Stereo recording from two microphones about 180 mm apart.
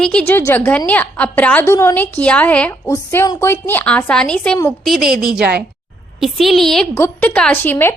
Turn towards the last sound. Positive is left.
turn(degrees=10)  # may be behind; listen again after turning